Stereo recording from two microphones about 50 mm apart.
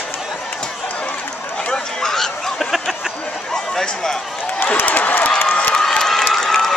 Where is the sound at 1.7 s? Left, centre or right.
Centre.